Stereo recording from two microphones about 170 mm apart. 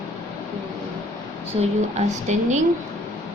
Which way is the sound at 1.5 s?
35° right (ahead or behind).